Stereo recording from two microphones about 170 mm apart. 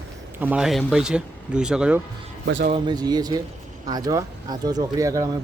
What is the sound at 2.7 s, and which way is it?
Speech, 25° right (ahead or behind).